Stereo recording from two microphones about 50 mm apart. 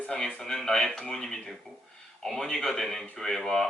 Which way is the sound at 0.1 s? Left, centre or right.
Centre.